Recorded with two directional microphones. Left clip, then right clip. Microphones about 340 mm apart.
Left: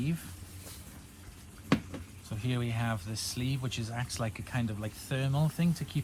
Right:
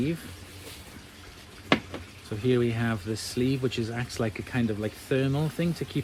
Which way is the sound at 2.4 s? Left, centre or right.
Left.